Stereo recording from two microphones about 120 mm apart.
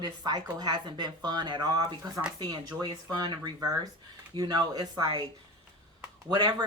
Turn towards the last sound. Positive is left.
turn(degrees=-35)  # may be behind; listen again after turning